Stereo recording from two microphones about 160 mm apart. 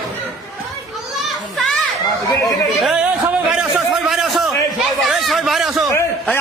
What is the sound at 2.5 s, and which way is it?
Speech, 5° right (ahead or behind).